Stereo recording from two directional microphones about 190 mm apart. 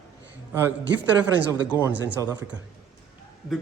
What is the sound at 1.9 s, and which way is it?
Speech, 65° right (ahead or behind).